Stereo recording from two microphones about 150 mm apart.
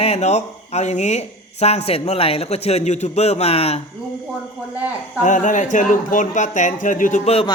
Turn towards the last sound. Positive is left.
turn(degrees=40)  # may be behind; listen again after turning